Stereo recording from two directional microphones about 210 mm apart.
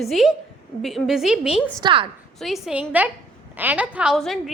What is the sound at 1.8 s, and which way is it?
Speech, 25° right (ahead or behind).